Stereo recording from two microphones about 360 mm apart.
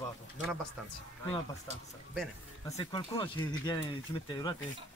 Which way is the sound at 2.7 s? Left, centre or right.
Centre.